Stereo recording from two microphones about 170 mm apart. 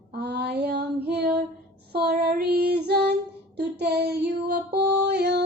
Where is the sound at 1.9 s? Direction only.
65° right (ahead or behind).